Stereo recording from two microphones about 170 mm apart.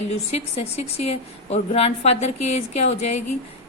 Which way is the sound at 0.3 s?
35° left (ahead or behind).